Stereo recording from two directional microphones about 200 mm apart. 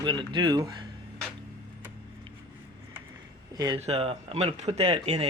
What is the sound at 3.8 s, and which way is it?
Speech, 30° right (ahead or behind).